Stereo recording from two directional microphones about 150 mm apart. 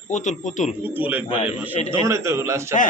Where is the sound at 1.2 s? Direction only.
40° left (ahead or behind).